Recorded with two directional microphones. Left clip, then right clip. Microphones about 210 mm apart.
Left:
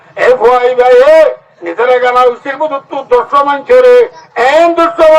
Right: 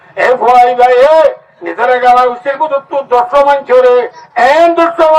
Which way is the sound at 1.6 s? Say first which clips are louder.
Right 1 dB; 20° left (ahead or behind).